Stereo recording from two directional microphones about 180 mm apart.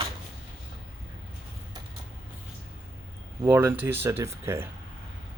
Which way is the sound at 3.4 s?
15° right (ahead or behind).